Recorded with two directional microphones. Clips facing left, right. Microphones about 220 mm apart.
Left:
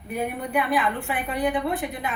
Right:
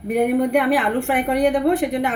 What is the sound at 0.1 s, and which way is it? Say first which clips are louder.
A woman's voice: right 10 dB; 65° right (ahead or behind).